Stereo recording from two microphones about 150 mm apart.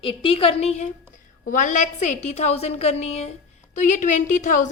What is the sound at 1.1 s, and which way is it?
A woman's voice, 60° left (ahead or behind).